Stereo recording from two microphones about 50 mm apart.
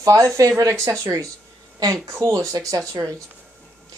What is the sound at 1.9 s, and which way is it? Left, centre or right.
Speech, right.